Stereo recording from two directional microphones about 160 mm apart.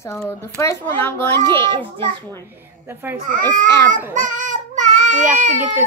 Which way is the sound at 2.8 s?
15° right (ahead or behind).